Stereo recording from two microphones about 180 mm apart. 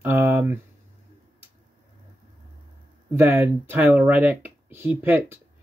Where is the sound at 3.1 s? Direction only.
15° right (ahead or behind).